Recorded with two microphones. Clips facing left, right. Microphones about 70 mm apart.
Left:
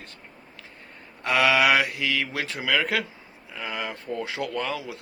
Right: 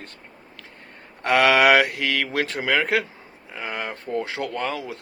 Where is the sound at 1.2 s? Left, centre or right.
Right.